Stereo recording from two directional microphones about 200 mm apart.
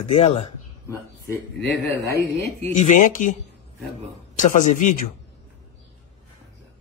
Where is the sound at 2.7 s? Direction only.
40° left (ahead or behind).